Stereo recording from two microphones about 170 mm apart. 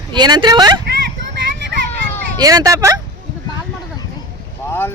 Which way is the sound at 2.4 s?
20° right (ahead or behind).